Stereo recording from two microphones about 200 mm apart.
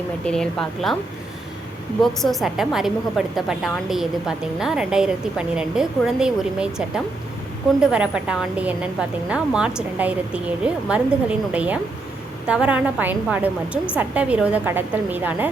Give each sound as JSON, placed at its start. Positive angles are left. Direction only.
{"t": 0.3, "sound": "a woman's voice", "side_deg": 0}
{"t": 2.0, "sound": "a woman's voice", "side_deg": 0}